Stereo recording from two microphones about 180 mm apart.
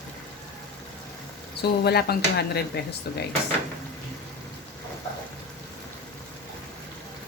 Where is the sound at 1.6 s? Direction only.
65° left (ahead or behind).